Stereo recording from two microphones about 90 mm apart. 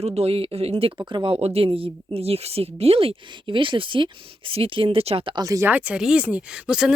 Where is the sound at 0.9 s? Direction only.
55° right (ahead or behind); by 5.4 s 80° right.